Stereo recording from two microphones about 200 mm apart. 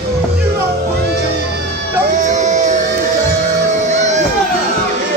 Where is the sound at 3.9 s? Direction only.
35° right (ahead or behind).